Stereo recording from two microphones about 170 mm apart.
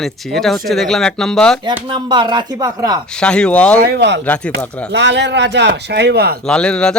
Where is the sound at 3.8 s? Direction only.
80° right.